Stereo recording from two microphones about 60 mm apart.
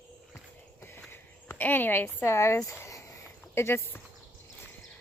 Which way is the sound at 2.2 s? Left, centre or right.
Left.